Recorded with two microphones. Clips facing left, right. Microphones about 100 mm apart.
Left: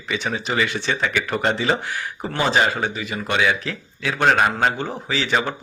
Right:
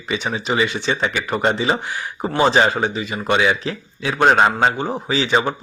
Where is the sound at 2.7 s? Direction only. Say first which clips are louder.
Right 3 dB; 20° right (ahead or behind).